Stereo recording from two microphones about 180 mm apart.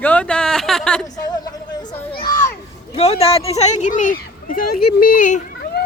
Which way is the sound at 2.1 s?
55° left (ahead or behind).